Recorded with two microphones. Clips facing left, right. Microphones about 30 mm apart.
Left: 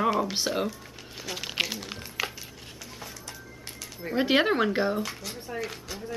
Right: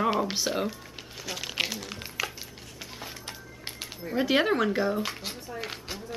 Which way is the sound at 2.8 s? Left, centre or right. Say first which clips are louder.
Right 2 dB; right.